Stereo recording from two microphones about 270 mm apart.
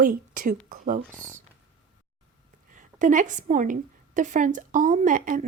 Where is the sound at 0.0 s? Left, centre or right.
Right.